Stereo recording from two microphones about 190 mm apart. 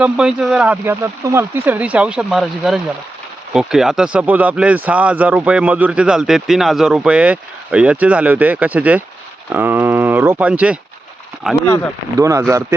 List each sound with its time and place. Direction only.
0.0 s speech: 5° right (ahead or behind)
12.2 s speech: 15° right (ahead or behind)